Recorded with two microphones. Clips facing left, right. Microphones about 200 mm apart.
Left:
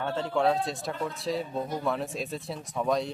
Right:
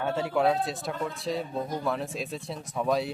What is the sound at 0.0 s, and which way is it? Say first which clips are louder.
Speech: right 1 dB; 10° right (ahead or behind).